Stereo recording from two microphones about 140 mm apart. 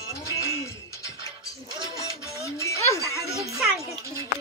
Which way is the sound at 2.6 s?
20° left (ahead or behind).